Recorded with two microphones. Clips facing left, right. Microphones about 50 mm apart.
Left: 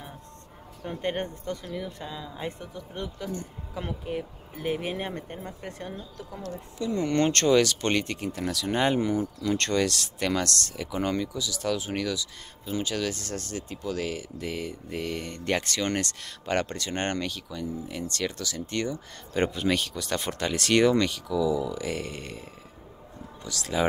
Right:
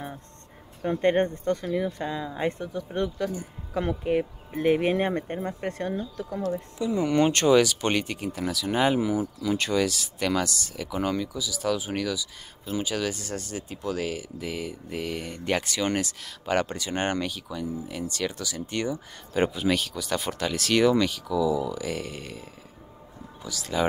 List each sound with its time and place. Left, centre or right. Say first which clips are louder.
0.8 s speech: right 8 dB; right
6.3 s speech: right 8 dB; centre